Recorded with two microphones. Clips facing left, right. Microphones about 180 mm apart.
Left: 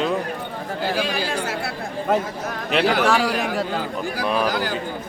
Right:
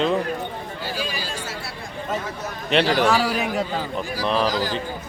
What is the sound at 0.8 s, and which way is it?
Chatter, 65° left (ahead or behind).